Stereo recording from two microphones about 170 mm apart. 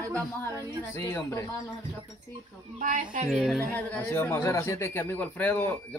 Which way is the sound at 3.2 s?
Centre (ahead or behind).